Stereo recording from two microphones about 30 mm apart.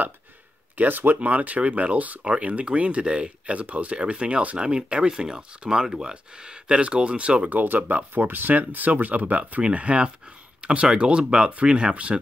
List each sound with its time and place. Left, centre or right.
0.7 s speech: right; by 6.1 s centre
6.3 s speech: right
7.4 s speech: right
9.6 s speech: right
11.9 s speech: right